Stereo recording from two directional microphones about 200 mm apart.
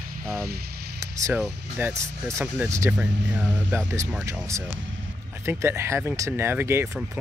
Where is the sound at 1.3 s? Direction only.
Centre (ahead or behind).